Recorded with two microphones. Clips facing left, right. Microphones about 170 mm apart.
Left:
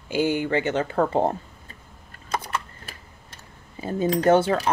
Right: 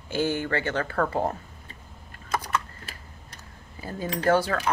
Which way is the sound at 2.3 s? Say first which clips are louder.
Even; 25° left (ahead or behind).